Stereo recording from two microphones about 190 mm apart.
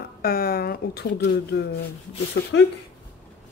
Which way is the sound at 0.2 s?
55° left (ahead or behind).